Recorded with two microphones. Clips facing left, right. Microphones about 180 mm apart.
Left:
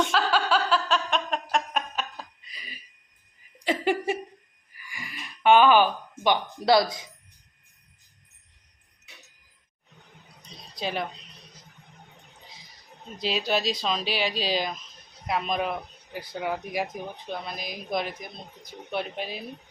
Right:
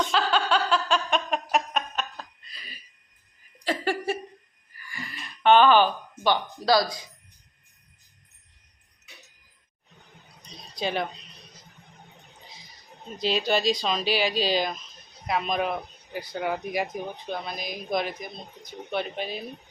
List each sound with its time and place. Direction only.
0.1 s a sound: 5° left (ahead or behind)
1.7 s a sound: 10° left (ahead or behind)
3.6 s laughter: 20° left (ahead or behind)
4.8 s speech: 15° left (ahead or behind)
10.8 s speech: centre (ahead or behind)
13.2 s speech: 5° left (ahead or behind)